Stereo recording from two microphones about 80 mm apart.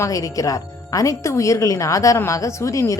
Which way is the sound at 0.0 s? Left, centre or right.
Left.